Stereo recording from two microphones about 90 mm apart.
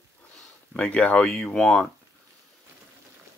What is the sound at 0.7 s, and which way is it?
Speech, 15° left (ahead or behind).